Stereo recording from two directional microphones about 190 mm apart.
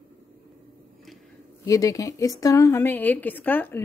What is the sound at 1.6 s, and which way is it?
A woman's voice, 15° left (ahead or behind).